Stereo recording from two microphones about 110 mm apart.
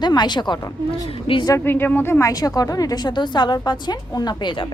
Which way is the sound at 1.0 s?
55° left (ahead or behind).